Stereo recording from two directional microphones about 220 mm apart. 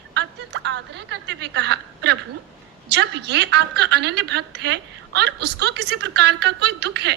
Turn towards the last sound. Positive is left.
turn(degrees=-50)  # may be behind; listen again after turning